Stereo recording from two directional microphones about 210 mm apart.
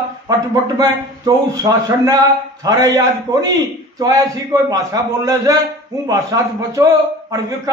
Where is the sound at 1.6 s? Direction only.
15° right (ahead or behind).